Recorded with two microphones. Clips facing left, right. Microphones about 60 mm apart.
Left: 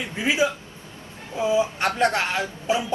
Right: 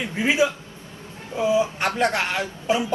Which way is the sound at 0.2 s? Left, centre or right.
Right.